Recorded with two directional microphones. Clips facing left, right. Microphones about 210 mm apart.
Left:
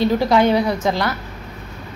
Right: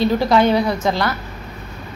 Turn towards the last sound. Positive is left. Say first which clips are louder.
# even
turn(degrees=15)  # may be behind; listen again after turning